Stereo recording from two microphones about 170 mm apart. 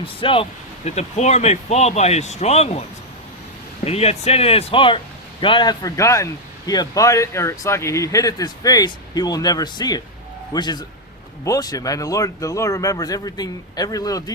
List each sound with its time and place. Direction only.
0.0 s speech: 30° left (ahead or behind)
3.8 s speech: 35° left (ahead or behind); by 14.3 s 20° left (ahead or behind)